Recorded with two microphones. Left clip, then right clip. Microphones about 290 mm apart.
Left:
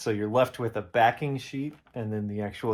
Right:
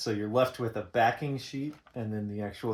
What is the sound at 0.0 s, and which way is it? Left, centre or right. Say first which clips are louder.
Speech: left 3 dB; left.